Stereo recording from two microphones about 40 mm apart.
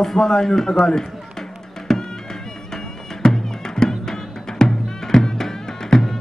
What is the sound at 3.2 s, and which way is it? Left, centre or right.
Music, centre.